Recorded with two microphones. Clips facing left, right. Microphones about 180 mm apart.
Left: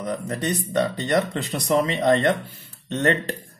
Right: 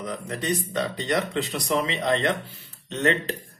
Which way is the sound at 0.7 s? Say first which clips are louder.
Left 7 dB; 45° left (ahead or behind).